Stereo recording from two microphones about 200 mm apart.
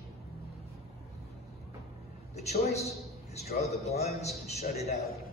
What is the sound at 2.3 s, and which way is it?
A man's voice, 35° left (ahead or behind).